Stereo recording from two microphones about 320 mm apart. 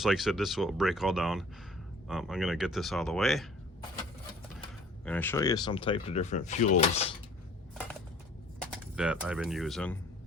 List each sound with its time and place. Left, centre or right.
0.0 s speech: centre
5.0 s speech: centre
8.6 s speech: centre